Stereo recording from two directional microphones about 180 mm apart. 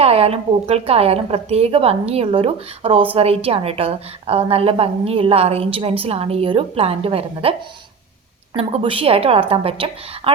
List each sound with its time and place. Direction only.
0.0 s a woman's voice: 35° right (ahead or behind)
8.5 s a woman's voice: 30° right (ahead or behind)